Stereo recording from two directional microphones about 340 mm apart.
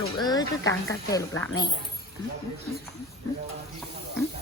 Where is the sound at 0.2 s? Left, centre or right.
Centre.